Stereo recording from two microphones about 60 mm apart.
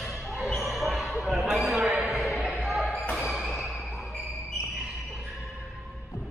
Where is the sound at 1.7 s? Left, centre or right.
Centre.